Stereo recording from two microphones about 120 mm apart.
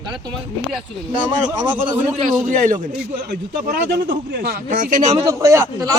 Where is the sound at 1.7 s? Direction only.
15° right (ahead or behind).